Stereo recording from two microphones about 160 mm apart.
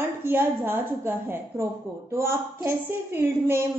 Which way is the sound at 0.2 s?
15° right (ahead or behind).